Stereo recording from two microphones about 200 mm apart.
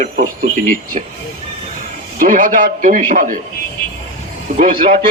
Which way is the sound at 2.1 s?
40° right (ahead or behind).